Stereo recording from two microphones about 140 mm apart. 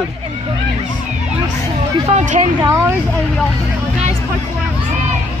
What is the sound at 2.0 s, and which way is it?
Speech, 55° right (ahead or behind).